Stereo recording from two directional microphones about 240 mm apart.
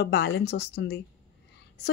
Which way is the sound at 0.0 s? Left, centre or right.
Left.